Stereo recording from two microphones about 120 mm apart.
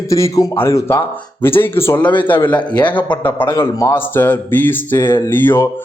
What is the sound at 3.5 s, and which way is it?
Speech, 30° left (ahead or behind).